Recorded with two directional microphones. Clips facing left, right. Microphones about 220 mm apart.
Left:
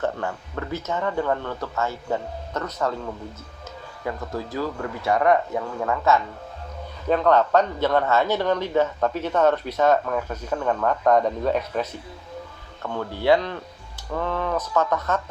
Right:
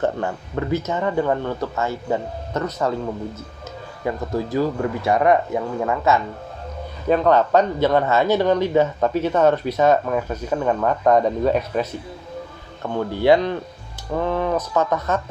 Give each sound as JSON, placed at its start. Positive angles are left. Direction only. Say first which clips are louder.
{"t": 0.0, "sound": "speech", "louder": "right 4 dB", "side_deg": -20}
{"t": 4.5, "sound": "speech", "louder": "right 8 dB", "side_deg": -20}